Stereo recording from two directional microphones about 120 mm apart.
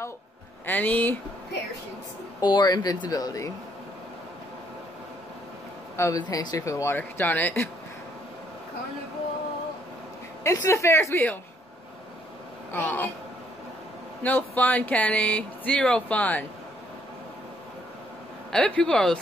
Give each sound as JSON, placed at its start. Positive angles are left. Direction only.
{"t": 0.7, "sound": "speech", "side_deg": 15}
{"t": 2.4, "sound": "speech", "side_deg": 35}
{"t": 5.9, "sound": "speech", "side_deg": 25}
{"t": 10.4, "sound": "speech", "side_deg": 25}
{"t": 12.7, "sound": "speech", "side_deg": 15}
{"t": 14.2, "sound": "speech", "side_deg": 15}
{"t": 18.5, "sound": "speech", "side_deg": 10}